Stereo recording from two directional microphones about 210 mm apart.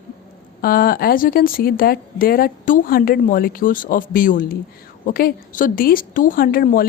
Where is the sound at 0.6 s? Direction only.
45° left (ahead or behind).